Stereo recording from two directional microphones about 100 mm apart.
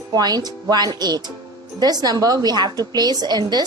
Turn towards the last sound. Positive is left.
turn(degrees=-45)  # may be behind; listen again after turning